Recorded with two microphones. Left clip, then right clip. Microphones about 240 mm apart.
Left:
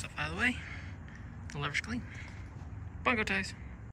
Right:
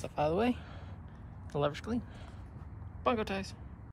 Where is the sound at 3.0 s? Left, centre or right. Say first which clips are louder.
Left 2 dB; centre.